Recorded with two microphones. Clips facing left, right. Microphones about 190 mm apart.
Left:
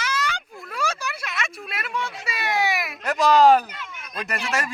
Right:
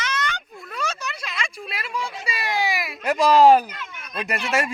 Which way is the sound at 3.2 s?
Centre (ahead or behind).